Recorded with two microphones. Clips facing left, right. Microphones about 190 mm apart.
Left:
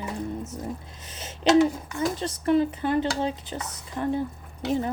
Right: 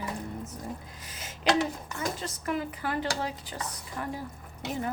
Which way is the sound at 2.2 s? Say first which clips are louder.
Left 10 dB; 30° left (ahead or behind).